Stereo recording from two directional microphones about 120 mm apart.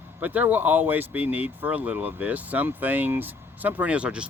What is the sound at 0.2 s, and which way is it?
Speech, 15° right (ahead or behind).